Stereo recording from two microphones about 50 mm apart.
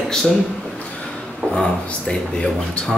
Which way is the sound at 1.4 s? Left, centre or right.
Left.